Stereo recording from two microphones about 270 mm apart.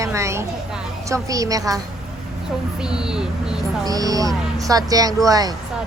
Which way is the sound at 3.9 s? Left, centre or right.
Centre.